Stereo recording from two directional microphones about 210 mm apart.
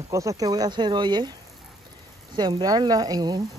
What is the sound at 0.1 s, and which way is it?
Speech, 15° right (ahead or behind).